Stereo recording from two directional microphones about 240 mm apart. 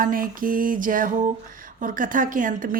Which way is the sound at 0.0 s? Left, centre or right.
Right.